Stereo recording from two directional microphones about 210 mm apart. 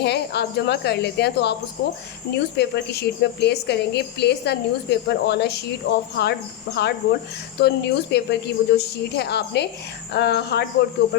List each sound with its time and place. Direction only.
0.0 s speech: 50° left (ahead or behind)